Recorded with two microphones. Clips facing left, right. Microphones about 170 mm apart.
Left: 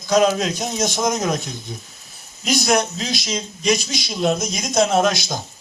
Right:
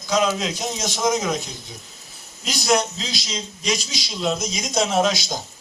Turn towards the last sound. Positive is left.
turn(degrees=50)  # may be behind; listen again after turning